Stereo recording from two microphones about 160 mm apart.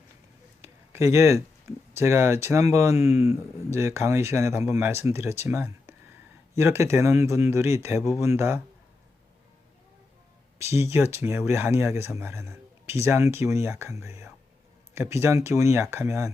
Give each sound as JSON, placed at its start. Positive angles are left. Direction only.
{"t": 0.6, "sound": "speech", "side_deg": -15}
{"t": 10.6, "sound": "speech", "side_deg": 40}
{"t": 10.8, "sound": "speech", "side_deg": -15}